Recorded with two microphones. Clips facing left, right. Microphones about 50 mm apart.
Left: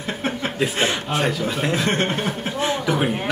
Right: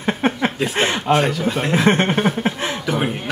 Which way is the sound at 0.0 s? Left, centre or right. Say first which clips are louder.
Right 6 dB; right.